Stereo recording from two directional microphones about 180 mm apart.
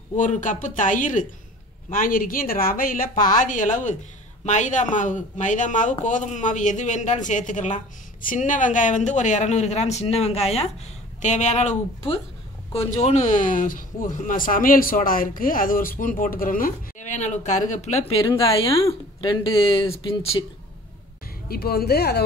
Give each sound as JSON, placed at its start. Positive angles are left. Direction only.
{"t": 0.1, "sound": "speech", "side_deg": 45}
{"t": 12.7, "sound": "speech", "side_deg": 40}
{"t": 18.1, "sound": "speech", "side_deg": 20}
{"t": 21.5, "sound": "speech", "side_deg": 60}